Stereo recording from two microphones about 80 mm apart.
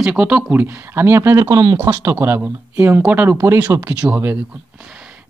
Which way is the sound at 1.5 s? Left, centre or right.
Right.